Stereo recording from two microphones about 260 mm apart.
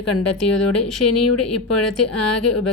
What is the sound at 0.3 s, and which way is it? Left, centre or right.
A woman's voice, left.